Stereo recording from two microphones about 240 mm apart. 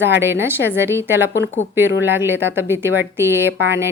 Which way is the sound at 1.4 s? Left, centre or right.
Left.